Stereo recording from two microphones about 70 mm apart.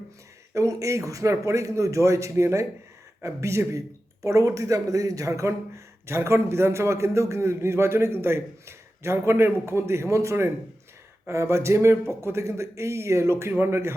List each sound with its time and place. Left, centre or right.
0.5 s a man's voice: right